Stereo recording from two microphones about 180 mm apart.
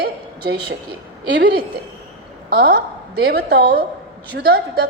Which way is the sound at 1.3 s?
70° right (ahead or behind).